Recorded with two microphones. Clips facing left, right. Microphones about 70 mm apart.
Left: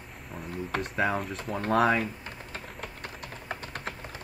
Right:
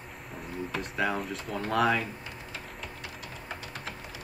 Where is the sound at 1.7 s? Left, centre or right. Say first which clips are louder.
Left 2 dB; left.